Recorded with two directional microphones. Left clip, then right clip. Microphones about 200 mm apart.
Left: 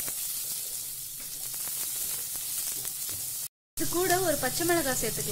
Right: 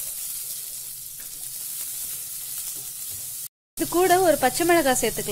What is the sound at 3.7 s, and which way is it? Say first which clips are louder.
Speech: right 8 dB; 30° right (ahead or behind).